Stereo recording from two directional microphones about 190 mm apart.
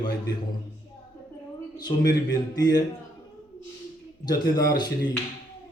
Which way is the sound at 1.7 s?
20° left (ahead or behind).